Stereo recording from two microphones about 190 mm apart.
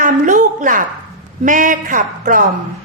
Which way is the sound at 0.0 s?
45° right (ahead or behind).